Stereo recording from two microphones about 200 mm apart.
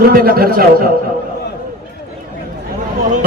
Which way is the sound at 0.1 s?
50° right (ahead or behind).